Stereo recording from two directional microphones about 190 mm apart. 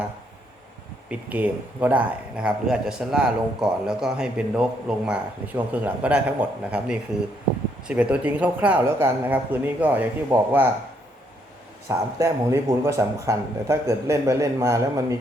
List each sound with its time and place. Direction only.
1.3 s a man's voice: 10° right (ahead or behind)
11.9 s speech: 15° right (ahead or behind)